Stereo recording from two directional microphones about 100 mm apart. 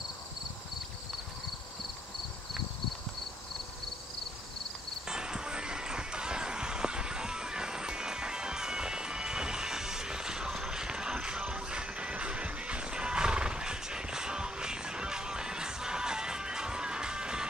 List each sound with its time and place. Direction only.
5.0 s music: 5° right (ahead or behind)